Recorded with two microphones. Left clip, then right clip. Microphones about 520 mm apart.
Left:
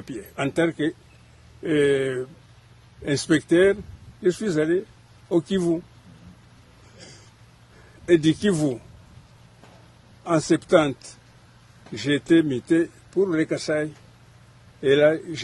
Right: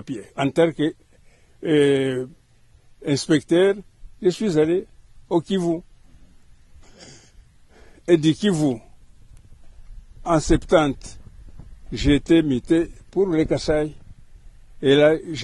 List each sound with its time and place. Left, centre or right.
0.0 s speech: right
7.0 s a sound: right
8.0 s speech: right
10.2 s speech: right